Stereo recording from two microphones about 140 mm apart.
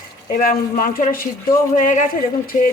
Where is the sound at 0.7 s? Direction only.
75° left (ahead or behind).